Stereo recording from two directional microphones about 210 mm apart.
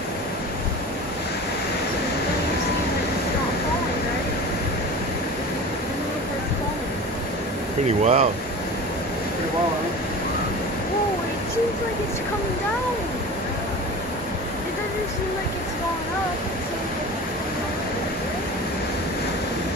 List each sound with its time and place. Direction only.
7.8 s speech: 35° right (ahead or behind)